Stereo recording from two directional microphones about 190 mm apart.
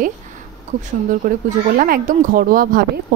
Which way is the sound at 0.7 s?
40° right (ahead or behind).